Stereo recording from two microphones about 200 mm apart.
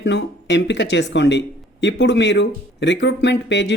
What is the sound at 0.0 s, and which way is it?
Speech, 60° left (ahead or behind).